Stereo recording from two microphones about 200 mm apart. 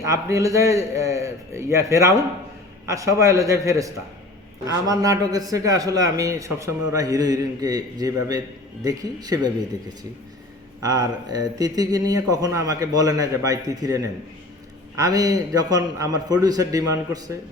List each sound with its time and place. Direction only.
0.0 s speech: 15° right (ahead or behind)
10.8 s speech: 20° right (ahead or behind)